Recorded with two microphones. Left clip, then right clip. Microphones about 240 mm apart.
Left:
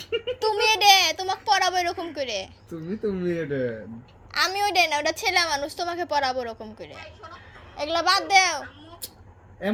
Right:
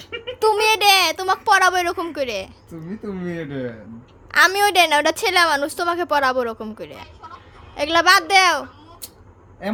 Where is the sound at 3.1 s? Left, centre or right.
Centre.